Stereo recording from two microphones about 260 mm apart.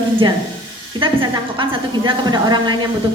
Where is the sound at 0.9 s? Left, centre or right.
Centre.